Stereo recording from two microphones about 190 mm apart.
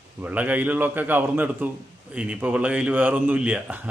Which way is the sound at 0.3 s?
10° right (ahead or behind).